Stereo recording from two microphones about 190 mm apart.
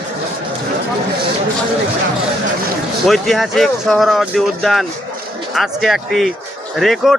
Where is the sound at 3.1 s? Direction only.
Centre (ahead or behind).